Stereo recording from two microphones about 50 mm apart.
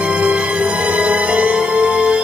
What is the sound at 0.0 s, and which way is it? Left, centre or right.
Music, right.